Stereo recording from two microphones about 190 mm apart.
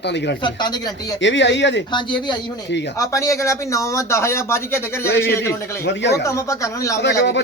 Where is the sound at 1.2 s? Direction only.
70° left (ahead or behind).